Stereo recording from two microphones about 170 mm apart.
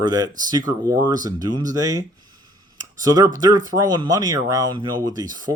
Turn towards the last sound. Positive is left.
turn(degrees=-25)  # may be behind; listen again after turning